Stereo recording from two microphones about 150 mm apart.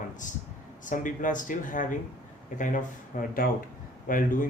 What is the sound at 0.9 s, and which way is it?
Speech, 60° left (ahead or behind).